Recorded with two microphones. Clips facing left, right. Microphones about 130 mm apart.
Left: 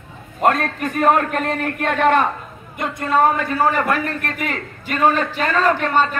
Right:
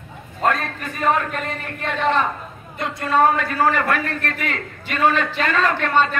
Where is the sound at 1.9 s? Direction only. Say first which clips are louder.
Left 4 dB; 55° left (ahead or behind).